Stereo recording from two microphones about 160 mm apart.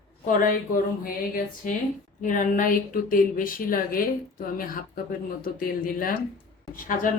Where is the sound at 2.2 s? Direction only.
55° left (ahead or behind).